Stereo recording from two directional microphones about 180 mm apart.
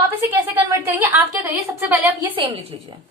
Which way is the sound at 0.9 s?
10° right (ahead or behind).